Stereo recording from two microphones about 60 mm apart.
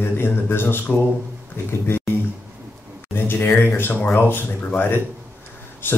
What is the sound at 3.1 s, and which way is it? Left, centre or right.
Speech, left.